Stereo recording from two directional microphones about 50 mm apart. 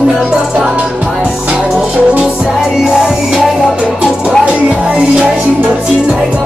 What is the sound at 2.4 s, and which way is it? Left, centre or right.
Music, centre.